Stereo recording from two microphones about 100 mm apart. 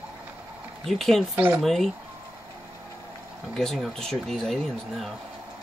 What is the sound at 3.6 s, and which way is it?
Speech, 5° left (ahead or behind).